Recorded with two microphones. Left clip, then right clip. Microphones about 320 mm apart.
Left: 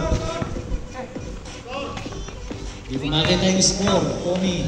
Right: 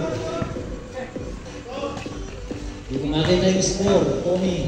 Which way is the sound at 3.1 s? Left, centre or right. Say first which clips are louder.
Even; left.